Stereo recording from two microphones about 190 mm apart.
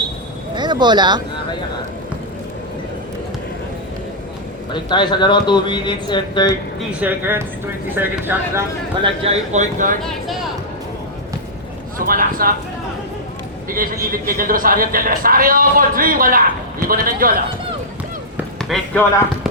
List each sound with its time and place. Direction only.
0.5 s speech: 25° right (ahead or behind)
4.7 s a man's voice: 25° left (ahead or behind)
7.0 s speech: 10° right (ahead or behind)
9.0 s speech: 30° right (ahead or behind)
10.0 s speech: centre (ahead or behind)
11.9 s speech: 50° right (ahead or behind)
13.7 s a man's voice: 45° right (ahead or behind)
18.7 s speech: centre (ahead or behind)